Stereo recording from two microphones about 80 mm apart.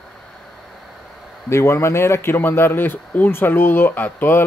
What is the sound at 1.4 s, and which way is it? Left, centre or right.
Speech, left.